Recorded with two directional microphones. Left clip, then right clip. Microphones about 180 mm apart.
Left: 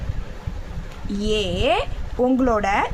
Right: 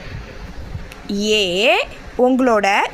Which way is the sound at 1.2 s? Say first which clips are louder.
Right 6 dB; 30° right (ahead or behind).